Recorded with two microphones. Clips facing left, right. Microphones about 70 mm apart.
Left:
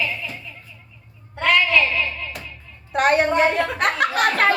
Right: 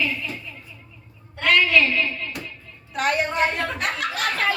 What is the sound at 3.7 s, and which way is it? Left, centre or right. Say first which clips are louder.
Speech: left 6 dB; left.